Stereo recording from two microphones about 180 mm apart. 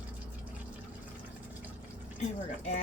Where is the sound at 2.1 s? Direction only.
40° left (ahead or behind).